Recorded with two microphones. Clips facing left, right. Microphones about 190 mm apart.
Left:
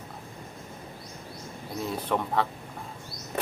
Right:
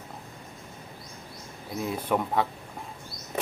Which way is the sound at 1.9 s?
10° right (ahead or behind).